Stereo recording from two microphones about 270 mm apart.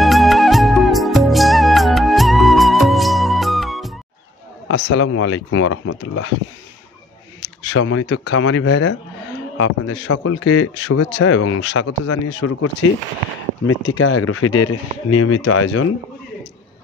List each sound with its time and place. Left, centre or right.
0.0 s music: centre
4.6 s a man's voice: left
7.7 s a man's voice: left
13.7 s a man's voice: left